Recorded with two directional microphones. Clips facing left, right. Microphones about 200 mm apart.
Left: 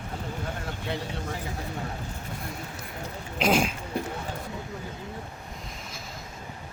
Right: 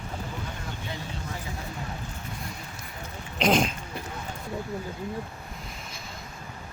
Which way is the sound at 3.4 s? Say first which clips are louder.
Right 1 dB; 5° left (ahead or behind).